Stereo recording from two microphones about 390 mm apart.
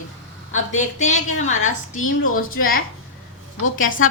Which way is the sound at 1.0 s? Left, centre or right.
Centre.